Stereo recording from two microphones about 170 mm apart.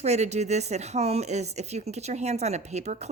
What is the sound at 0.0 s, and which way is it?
A woman's voice, 40° right (ahead or behind).